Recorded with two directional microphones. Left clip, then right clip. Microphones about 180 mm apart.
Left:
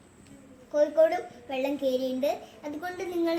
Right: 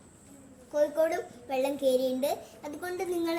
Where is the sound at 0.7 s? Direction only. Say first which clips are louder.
Left 4 dB; 30° right (ahead or behind).